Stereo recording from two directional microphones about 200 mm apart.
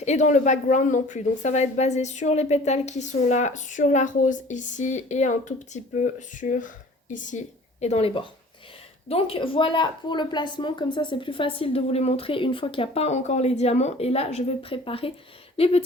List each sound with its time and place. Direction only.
0.0 s a woman's voice: 35° left (ahead or behind)